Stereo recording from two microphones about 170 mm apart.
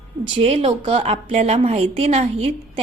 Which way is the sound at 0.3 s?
35° right (ahead or behind).